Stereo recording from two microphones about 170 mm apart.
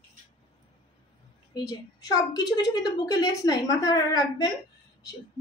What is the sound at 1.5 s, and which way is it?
A woman's voice, 20° left (ahead or behind).